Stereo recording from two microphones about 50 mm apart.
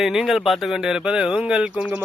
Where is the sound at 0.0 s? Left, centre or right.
Centre.